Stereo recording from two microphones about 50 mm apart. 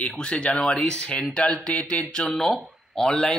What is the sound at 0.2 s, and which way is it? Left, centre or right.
Speech, left.